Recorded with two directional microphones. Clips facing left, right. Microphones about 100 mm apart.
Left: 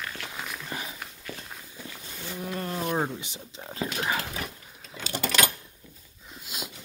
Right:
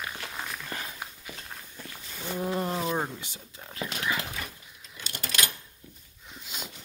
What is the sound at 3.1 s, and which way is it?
Speech, 20° left (ahead or behind).